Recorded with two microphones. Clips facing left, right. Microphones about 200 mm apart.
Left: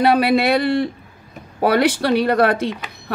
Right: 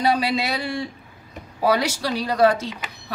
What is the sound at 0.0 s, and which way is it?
Speech, 60° left (ahead or behind).